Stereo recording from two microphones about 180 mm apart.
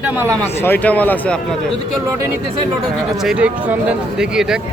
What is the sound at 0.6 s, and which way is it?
Speech, 10° left (ahead or behind).